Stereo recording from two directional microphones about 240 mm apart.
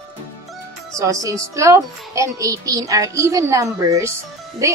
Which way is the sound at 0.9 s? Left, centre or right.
Centre.